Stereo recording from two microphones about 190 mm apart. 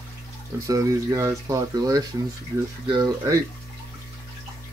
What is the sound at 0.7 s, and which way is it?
Speech, 20° right (ahead or behind).